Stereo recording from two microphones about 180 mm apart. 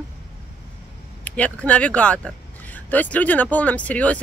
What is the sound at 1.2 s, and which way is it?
Speech, 10° left (ahead or behind).